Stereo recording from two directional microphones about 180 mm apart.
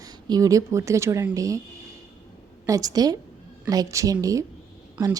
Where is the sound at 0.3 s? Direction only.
20° right (ahead or behind).